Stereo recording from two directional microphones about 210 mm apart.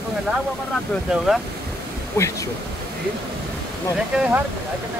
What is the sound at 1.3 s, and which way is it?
Speech, 5° right (ahead or behind).